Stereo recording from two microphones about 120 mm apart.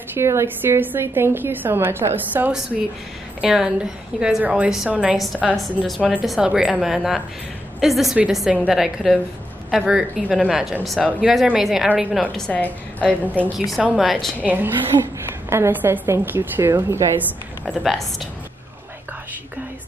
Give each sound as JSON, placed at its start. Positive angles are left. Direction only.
{"t": 0.2, "sound": "a woman's voice", "side_deg": -20}
{"t": 12.4, "sound": "a woman's voice", "side_deg": 10}
{"t": 13.9, "sound": "a woman's voice", "side_deg": 0}
{"t": 14.4, "sound": "a woman's voice", "side_deg": -15}
{"t": 17.6, "sound": "a woman's voice", "side_deg": 0}